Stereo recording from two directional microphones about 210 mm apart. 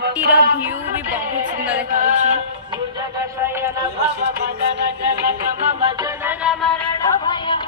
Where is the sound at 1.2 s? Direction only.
40° right (ahead or behind).